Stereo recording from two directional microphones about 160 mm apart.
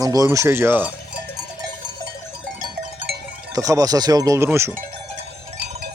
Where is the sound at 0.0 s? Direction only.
20° right (ahead or behind).